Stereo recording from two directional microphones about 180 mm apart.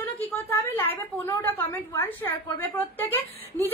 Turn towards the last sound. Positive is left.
turn(degrees=10)  # may be behind; listen again after turning